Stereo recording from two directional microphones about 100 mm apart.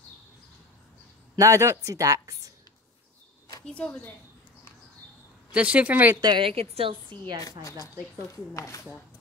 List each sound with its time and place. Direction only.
1.3 s speech: 30° right (ahead or behind)
3.6 s a woman's voice: 15° left (ahead or behind)
5.5 s a woman's voice: 15° right (ahead or behind)
6.2 s a woman's voice: 50° right (ahead or behind)
6.5 s a woman's voice: 75° right (ahead or behind); by 7.3 s 55° right (ahead or behind)
7.6 s a woman's voice: 35° left (ahead or behind)